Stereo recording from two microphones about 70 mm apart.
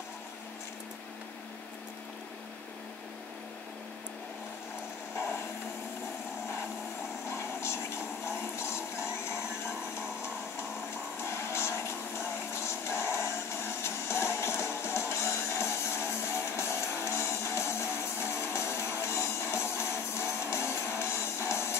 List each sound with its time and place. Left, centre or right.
7.2 s television: left
11.2 s music: left